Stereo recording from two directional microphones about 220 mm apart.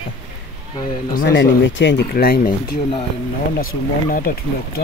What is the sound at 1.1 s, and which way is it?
Speech, 50° left (ahead or behind).